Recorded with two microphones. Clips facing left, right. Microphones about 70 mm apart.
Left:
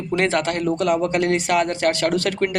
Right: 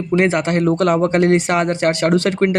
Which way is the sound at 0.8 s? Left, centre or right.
Right.